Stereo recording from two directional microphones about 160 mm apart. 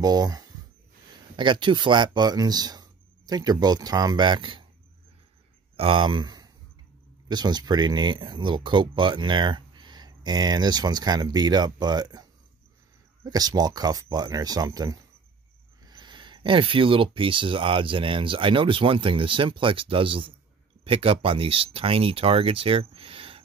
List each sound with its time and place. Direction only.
0.0 s speech: 25° right (ahead or behind)
5.8 s speech: 35° right (ahead or behind)